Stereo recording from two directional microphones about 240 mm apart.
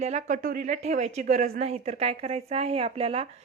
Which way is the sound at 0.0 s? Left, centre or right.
Right.